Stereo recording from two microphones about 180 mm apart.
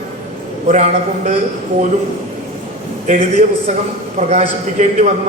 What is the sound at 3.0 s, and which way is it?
A man's voice, 40° right (ahead or behind).